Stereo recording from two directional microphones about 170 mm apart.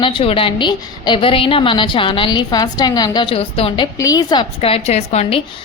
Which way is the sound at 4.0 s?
20° left (ahead or behind).